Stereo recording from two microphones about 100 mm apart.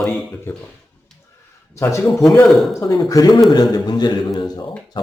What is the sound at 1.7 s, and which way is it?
Speech, 30° left (ahead or behind).